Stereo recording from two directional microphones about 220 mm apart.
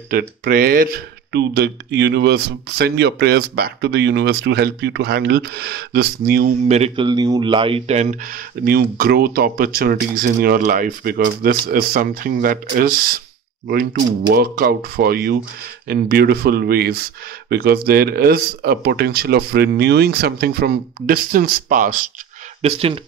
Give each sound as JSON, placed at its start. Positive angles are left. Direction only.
{"t": 0.4, "sound": "speech", "side_deg": -40}
{"t": 6.7, "sound": "speech", "side_deg": -25}
{"t": 14.3, "sound": "speech", "side_deg": -45}
{"t": 22.6, "sound": "speech", "side_deg": -30}